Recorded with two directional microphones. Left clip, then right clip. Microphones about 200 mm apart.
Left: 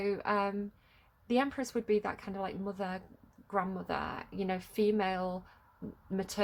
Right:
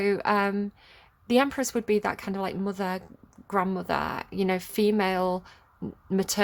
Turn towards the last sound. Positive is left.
turn(degrees=-45)  # may be behind; listen again after turning